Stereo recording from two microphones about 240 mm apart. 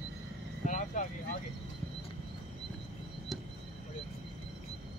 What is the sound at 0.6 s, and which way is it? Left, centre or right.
Vehicle, left.